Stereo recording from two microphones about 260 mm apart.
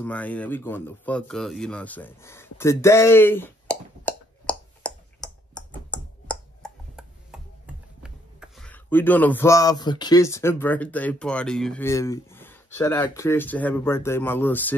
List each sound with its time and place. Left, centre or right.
0.0 s speech: centre